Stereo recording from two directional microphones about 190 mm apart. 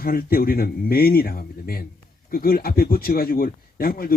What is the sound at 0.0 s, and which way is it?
A man's voice, 50° left (ahead or behind).